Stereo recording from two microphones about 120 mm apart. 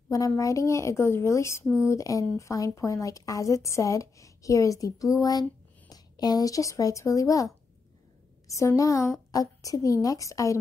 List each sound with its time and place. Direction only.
0.1 s speech: 30° left (ahead or behind)